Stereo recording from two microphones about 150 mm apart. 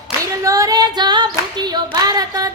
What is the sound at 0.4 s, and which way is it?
Female singing, 25° right (ahead or behind).